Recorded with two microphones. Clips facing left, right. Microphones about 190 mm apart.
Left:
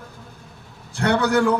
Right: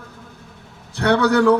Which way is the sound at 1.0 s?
65° right (ahead or behind).